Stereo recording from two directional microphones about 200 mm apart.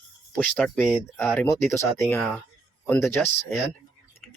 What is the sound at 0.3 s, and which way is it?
Speech, 5° left (ahead or behind).